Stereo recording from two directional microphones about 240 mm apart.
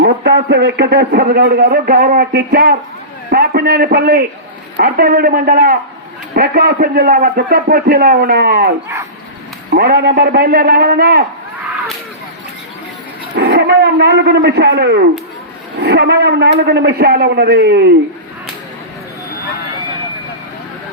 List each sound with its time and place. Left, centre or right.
0.0 s a man's voice: right
9.7 s a man's voice: right
13.3 s a man's voice: right